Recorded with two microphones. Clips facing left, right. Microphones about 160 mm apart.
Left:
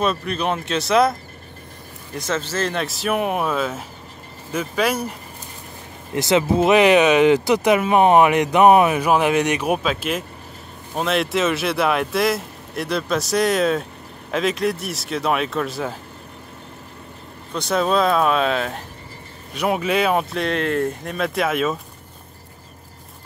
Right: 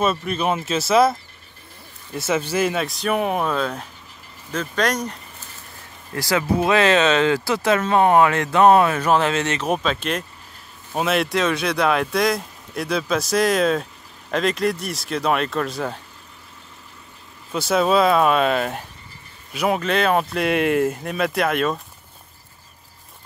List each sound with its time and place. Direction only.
0.0 s speech: 5° right (ahead or behind)
2.1 s speech: 10° right (ahead or behind); by 5.1 s 5° left (ahead or behind)
6.1 s speech: 20° left (ahead or behind); by 16.0 s centre (ahead or behind)
17.5 s speech: 5° right (ahead or behind)